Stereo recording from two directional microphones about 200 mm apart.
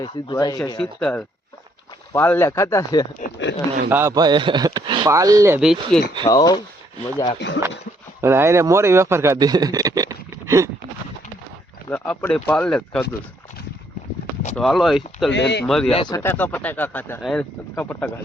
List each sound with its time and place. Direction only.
0.0 s speech: 20° left (ahead or behind)
0.8 s speech: 5° left (ahead or behind)
3.2 s speech: 60° left (ahead or behind)
3.8 s speech: 10° right (ahead or behind)
5.5 s speech: centre (ahead or behind)
6.2 s speech: 20° left (ahead or behind)
7.3 s speech: 65° left (ahead or behind)
8.2 s a man's voice: 10° right (ahead or behind)
11.9 s speech: 5° left (ahead or behind)
14.5 s speech: centre (ahead or behind)
15.3 s speech: 60° left (ahead or behind)
15.6 s speech: centre (ahead or behind)
15.9 s speech: 25° left (ahead or behind); by 18.1 s 5° left (ahead or behind)